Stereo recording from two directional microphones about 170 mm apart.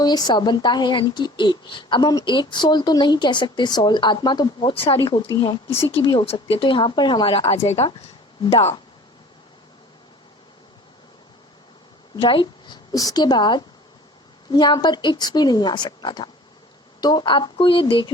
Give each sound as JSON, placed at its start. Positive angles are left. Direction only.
{"t": 0.0, "sound": "a woman's voice", "side_deg": 25}
{"t": 12.1, "sound": "a woman's voice", "side_deg": 30}